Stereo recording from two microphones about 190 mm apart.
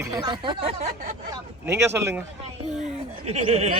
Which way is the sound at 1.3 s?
15° right (ahead or behind).